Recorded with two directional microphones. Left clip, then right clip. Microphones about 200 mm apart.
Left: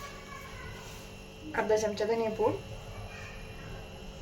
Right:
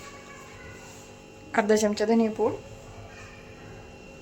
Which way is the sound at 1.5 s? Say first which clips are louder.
Right 5 dB; 55° right (ahead or behind).